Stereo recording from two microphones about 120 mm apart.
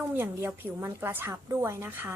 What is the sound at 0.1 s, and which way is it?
A woman's voice, 15° right (ahead or behind).